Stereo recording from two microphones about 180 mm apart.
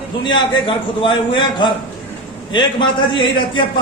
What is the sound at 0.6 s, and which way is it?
Speech, 30° left (ahead or behind).